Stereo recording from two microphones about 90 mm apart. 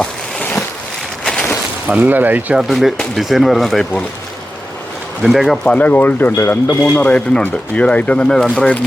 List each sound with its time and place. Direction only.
0.0 s a sound: 10° left (ahead or behind)
1.9 s speech: 20° right (ahead or behind)
2.6 s speech: centre (ahead or behind)
5.2 s speech: centre (ahead or behind)
5.6 s speech: 15° left (ahead or behind)